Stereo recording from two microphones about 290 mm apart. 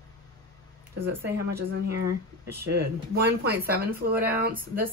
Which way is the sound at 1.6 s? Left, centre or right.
Right.